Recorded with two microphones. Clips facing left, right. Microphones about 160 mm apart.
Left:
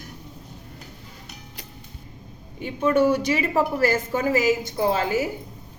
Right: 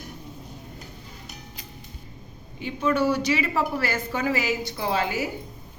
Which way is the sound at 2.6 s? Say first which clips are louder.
Left 3 dB; 50° left (ahead or behind).